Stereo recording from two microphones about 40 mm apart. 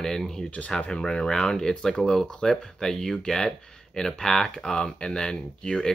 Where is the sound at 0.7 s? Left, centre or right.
Left.